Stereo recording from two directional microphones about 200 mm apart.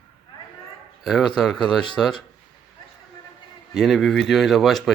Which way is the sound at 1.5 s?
25° left (ahead or behind).